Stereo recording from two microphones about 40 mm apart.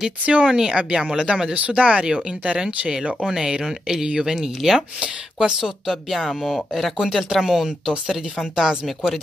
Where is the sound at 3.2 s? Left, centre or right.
Centre.